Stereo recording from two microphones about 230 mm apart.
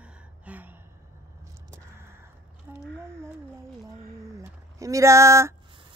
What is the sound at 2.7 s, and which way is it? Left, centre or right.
Speech, centre.